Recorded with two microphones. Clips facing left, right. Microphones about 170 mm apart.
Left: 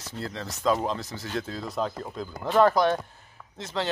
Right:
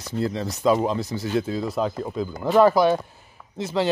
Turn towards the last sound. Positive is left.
turn(degrees=-10)  # may be behind; listen again after turning